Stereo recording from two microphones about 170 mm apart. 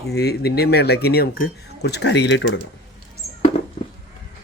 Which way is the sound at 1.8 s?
85° left.